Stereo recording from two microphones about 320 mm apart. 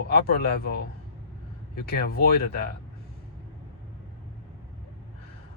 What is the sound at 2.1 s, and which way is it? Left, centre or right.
Speech, left.